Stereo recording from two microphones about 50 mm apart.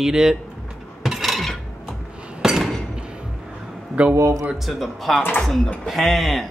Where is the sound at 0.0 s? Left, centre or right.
Centre.